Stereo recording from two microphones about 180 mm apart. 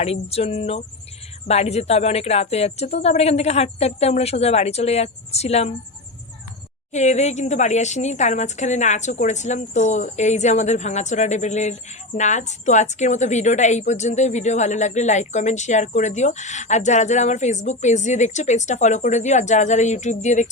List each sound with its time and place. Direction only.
0.0 s a woman's voice: 35° left (ahead or behind)
6.9 s a woman's voice: 40° left (ahead or behind)